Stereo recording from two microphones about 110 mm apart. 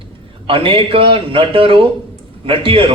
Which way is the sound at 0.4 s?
55° right (ahead or behind).